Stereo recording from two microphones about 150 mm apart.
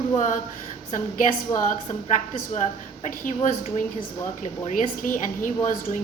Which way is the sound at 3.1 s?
60° left (ahead or behind).